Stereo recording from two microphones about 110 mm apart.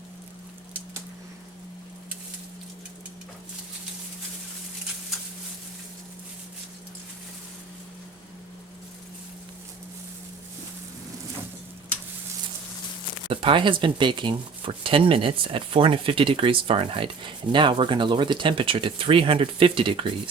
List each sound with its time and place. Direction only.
13.3 s speech: 50° right (ahead or behind)